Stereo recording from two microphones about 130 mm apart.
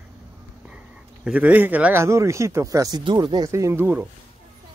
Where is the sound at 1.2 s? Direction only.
10° right (ahead or behind).